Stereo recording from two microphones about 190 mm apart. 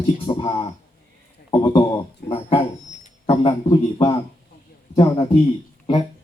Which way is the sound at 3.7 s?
20° left (ahead or behind).